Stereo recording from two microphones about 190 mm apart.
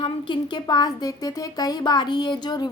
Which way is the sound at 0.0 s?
25° left (ahead or behind).